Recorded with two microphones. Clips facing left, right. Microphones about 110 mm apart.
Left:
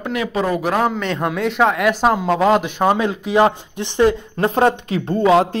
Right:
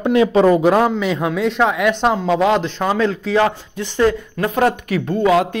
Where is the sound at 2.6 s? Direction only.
15° left (ahead or behind).